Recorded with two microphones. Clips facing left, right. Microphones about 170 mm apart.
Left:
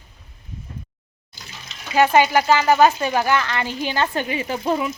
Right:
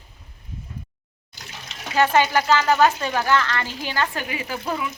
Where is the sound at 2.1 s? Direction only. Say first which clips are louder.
Left 2 dB; 15° left (ahead or behind).